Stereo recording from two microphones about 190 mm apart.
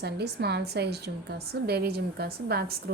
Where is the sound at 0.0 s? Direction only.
60° right (ahead or behind).